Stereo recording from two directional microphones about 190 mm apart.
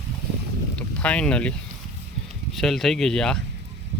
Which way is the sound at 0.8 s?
5° left (ahead or behind).